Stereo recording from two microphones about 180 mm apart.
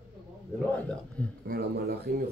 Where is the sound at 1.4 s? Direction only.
60° right (ahead or behind).